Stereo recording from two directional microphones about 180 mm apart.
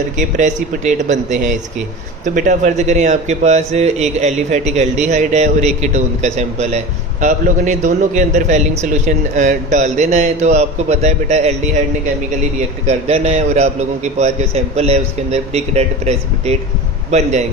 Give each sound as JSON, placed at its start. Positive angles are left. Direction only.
{"t": 0.2, "sound": "a man's voice", "side_deg": -45}